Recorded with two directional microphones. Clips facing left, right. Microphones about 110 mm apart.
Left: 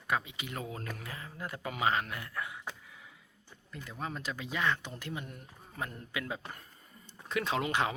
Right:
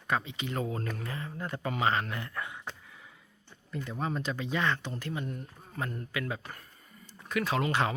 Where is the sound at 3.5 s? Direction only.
5° left (ahead or behind).